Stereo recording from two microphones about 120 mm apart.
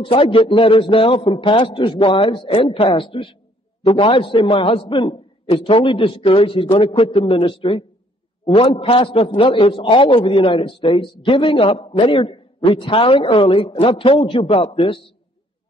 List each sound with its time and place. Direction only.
0.0 s a man's voice: 45° left (ahead or behind)